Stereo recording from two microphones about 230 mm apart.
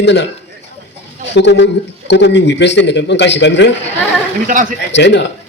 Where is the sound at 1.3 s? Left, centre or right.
Left.